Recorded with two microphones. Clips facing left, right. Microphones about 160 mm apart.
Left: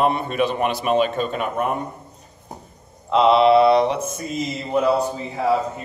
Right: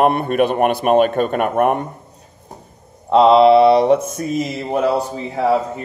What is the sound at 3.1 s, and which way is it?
Mantra, 35° right (ahead or behind).